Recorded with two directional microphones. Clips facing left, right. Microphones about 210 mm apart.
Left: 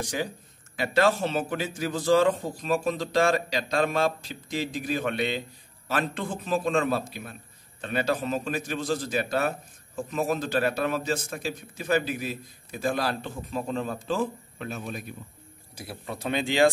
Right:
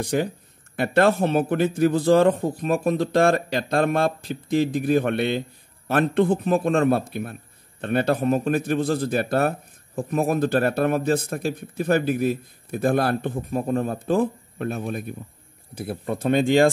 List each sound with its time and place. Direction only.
0.0 s speech: 55° right (ahead or behind)